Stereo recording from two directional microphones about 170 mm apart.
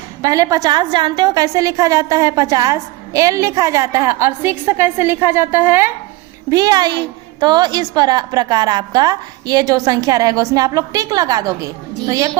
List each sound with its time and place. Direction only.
0.2 s a woman's voice: 20° right (ahead or behind)